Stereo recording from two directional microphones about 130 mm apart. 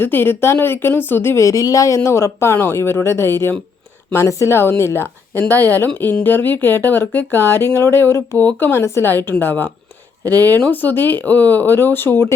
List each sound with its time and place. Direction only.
0.0 s speech: 15° left (ahead or behind)